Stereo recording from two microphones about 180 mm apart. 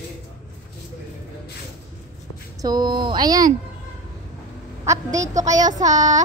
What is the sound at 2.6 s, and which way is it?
Speech, 25° right (ahead or behind).